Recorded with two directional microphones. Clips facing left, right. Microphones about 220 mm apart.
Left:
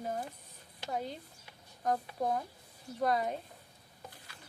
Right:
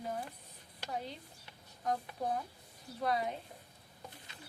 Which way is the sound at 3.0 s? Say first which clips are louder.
Left 3 dB; 45° left (ahead or behind).